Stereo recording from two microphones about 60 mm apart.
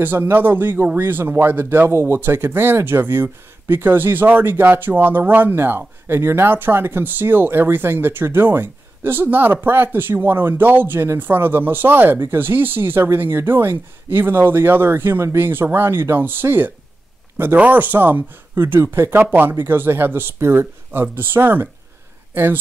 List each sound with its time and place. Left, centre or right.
0.0 s speech: right
18.5 s speech: right